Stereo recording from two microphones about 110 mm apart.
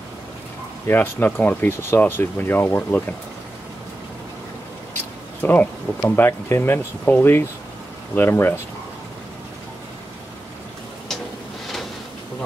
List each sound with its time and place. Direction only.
0.8 s speech: 15° left (ahead or behind)
5.4 s speech: 15° left (ahead or behind)